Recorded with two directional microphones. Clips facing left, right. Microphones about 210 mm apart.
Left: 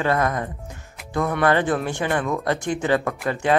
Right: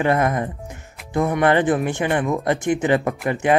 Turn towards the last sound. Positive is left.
turn(degrees=-20)  # may be behind; listen again after turning